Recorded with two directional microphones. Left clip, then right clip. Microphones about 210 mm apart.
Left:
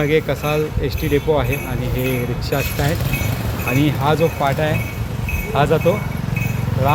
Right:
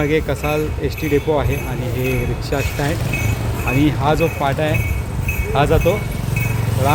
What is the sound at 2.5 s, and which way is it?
Speech, 5° left (ahead or behind).